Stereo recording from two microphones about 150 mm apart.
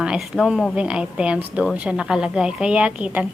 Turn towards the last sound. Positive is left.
turn(degrees=-10)  # may be behind; listen again after turning